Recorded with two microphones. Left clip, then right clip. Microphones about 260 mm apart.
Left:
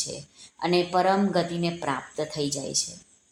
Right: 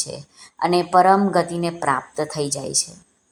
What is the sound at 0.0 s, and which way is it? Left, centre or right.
A woman's voice, right.